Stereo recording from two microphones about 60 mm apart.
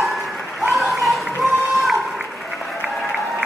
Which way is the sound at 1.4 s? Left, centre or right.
Centre.